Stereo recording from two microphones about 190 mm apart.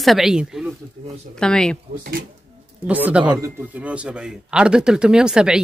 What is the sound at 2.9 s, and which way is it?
Speech, 10° right (ahead or behind).